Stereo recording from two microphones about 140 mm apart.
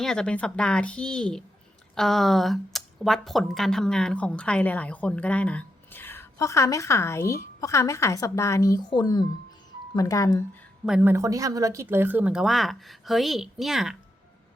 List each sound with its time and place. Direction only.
0.0 s speech: 5° left (ahead or behind); by 10.6 s 20° left (ahead or behind)
10.8 s speech: 5° right (ahead or behind)
11.1 s speech: 25° right (ahead or behind); by 13.9 s centre (ahead or behind)